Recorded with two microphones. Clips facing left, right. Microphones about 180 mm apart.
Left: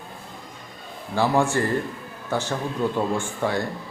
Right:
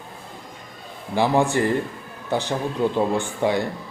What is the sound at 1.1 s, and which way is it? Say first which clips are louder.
Speech: right 2 dB; 20° right (ahead or behind).